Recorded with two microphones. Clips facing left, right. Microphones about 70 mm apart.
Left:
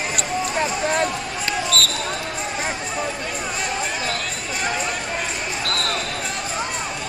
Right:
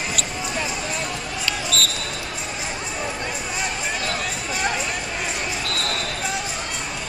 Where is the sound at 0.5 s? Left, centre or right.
Left.